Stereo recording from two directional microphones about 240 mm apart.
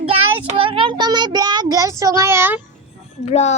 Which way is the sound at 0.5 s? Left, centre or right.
Right.